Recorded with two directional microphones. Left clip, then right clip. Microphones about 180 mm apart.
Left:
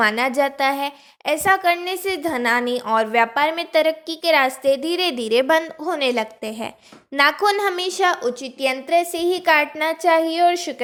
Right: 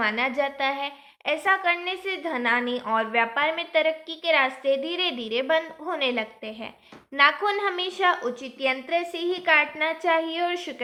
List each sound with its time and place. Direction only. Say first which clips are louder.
0.0 s a woman's voice: left 6 dB; 50° left (ahead or behind)
7.7 s a woman's voice: left 4 dB; 40° left (ahead or behind)